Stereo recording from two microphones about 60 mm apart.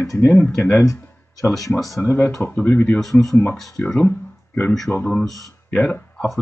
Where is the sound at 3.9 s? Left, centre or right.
Left.